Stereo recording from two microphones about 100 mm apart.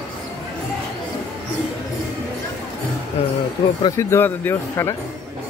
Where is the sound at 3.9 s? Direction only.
20° left (ahead or behind).